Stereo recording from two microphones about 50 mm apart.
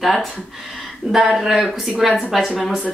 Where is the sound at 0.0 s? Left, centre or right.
Centre.